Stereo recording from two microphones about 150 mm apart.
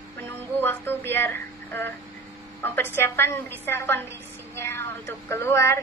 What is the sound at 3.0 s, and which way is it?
A woman's voice, 15° left (ahead or behind).